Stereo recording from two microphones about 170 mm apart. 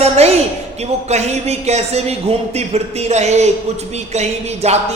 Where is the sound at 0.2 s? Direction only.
40° right (ahead or behind).